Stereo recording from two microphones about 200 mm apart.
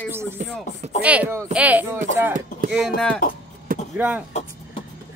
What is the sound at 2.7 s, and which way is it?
Speech, centre (ahead or behind).